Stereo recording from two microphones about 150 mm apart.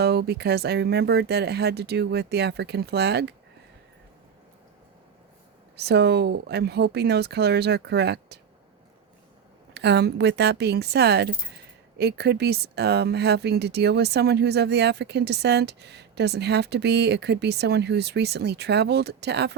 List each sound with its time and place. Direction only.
0.0 s speech: 90° right
5.8 s speech: 90° right
9.9 s speech: 90° right